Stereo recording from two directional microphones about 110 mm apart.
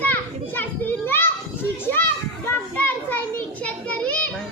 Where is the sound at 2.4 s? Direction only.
15° left (ahead or behind).